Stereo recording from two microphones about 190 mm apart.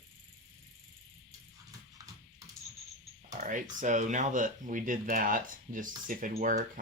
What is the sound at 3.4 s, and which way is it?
Speech, 40° right (ahead or behind).